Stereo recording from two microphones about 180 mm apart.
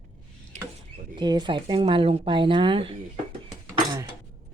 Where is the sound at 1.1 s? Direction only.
25° right (ahead or behind).